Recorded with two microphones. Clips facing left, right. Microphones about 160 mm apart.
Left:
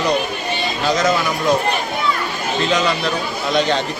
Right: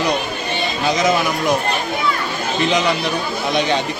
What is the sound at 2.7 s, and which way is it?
Speech, 15° right (ahead or behind).